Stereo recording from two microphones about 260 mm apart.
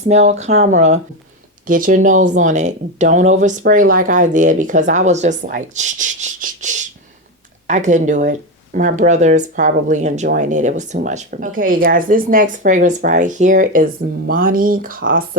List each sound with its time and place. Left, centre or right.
0.1 s speech: right